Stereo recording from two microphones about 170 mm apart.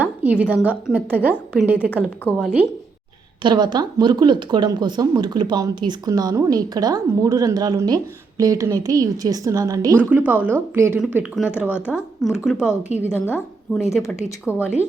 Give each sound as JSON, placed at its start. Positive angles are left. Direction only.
{"t": 0.0, "sound": "a woman's voice", "side_deg": -10}
{"t": 3.4, "sound": "a woman's voice", "side_deg": -25}
{"t": 11.0, "sound": "a woman's voice", "side_deg": -5}
{"t": 13.0, "sound": "a woman's voice", "side_deg": 15}
{"t": 14.2, "sound": "speech", "side_deg": -5}